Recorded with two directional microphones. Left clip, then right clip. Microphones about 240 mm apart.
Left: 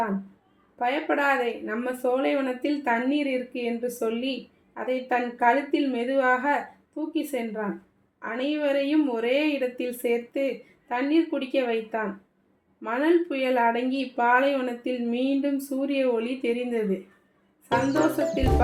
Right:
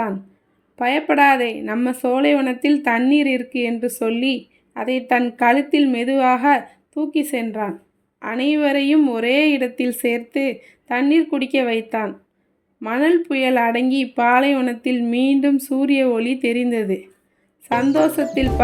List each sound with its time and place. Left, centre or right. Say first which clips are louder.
0.8 s speech: right 9 dB; right
17.7 s speech: right 6 dB; centre